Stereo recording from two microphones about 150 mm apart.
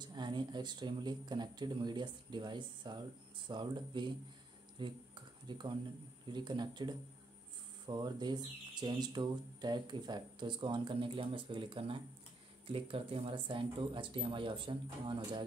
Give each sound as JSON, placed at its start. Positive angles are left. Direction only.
{"t": 0.0, "sound": "speech", "side_deg": -30}
{"t": 4.7, "sound": "a sound", "side_deg": -30}
{"t": 6.2, "sound": "speech", "side_deg": -30}